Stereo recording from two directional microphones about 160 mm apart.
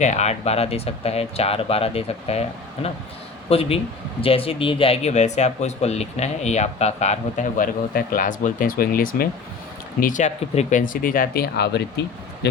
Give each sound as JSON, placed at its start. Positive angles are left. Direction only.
{"t": 0.0, "sound": "speech", "side_deg": 45}
{"t": 10.0, "sound": "speech", "side_deg": 50}